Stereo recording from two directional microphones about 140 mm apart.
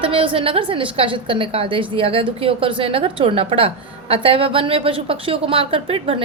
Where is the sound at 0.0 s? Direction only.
40° right (ahead or behind).